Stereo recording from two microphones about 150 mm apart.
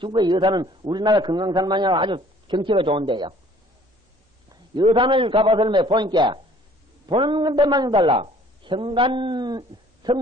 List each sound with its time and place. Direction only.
0.0 s a man's voice: 30° right (ahead or behind)
4.8 s a man's voice: 35° right (ahead or behind)